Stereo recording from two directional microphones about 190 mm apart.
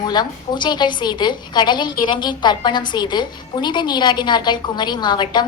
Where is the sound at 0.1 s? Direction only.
25° left (ahead or behind).